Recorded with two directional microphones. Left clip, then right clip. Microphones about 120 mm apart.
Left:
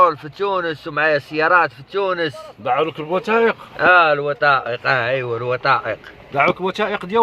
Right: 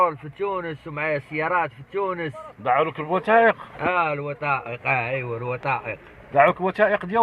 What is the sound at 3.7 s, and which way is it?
Speech, 35° left (ahead or behind).